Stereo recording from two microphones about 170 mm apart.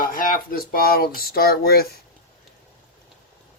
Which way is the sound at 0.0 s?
55° left (ahead or behind).